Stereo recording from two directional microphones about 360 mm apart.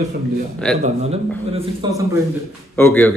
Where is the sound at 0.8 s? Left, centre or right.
Centre.